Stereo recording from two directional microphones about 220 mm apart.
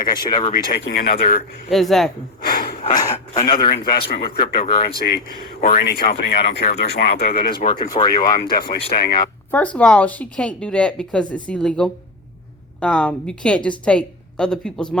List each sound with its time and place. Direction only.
0.1 s speech: 20° left (ahead or behind)
0.5 s speech: 45° left (ahead or behind)
1.7 s speech: centre (ahead or behind)
2.4 s snort: 45° left (ahead or behind)
2.9 s speech: 15° left (ahead or behind)
3.7 s speech: 45° left (ahead or behind)
4.6 s speech: 25° left (ahead or behind)
4.9 s speech: 45° left (ahead or behind)
7.8 s speech: 20° left (ahead or behind)
8.1 s speech: 40° left (ahead or behind)
9.5 s speech: 5° left (ahead or behind)